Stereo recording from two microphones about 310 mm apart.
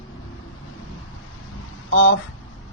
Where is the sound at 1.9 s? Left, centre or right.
Left.